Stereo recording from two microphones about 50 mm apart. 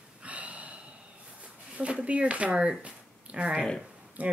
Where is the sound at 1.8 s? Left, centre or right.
Right.